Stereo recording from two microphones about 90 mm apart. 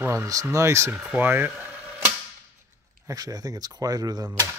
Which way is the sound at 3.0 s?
45° right (ahead or behind).